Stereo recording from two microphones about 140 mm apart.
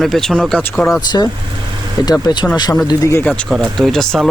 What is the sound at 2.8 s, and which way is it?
Speech, 25° left (ahead or behind).